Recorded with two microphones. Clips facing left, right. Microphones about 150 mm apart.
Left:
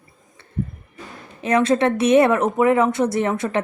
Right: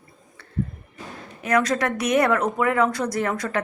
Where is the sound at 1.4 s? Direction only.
25° left (ahead or behind).